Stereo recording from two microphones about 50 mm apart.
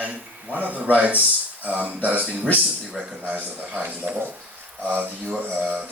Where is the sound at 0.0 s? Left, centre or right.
Right.